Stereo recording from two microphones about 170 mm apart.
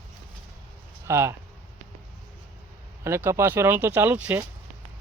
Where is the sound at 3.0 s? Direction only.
15° right (ahead or behind).